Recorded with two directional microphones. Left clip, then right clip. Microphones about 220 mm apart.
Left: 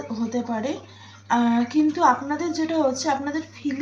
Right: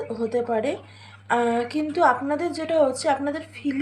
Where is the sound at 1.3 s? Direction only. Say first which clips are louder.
Even; 45° right (ahead or behind).